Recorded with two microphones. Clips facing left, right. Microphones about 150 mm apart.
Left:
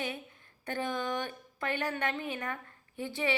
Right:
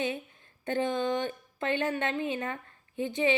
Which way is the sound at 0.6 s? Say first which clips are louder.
Right 5 dB; 20° right (ahead or behind).